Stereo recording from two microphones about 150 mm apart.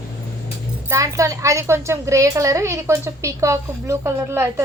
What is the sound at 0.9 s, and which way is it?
A woman's voice, 20° right (ahead or behind).